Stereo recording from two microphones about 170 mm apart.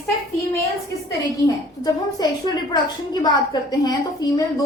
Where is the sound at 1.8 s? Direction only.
25° left (ahead or behind).